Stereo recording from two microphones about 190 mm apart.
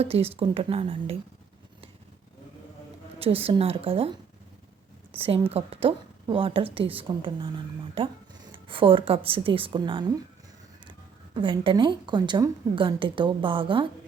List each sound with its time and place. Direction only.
0.0 s a woman's voice: 30° right (ahead or behind)
3.2 s a woman's voice: 30° right (ahead or behind)
5.1 s a woman's voice: 30° right (ahead or behind)
8.5 s a woman's voice: 25° right (ahead or behind)
11.3 s a woman's voice: 25° right (ahead or behind)